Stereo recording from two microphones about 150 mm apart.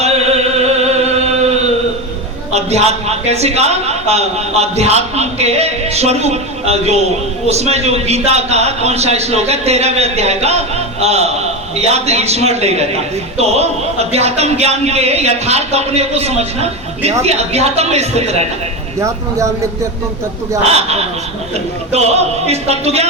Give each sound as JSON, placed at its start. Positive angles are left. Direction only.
{"t": 0.6, "sound": "music", "side_deg": -45}
{"t": 2.5, "sound": "a man's voice", "side_deg": -45}
{"t": 18.9, "sound": "speech", "side_deg": -20}
{"t": 20.7, "sound": "a man's voice", "side_deg": -45}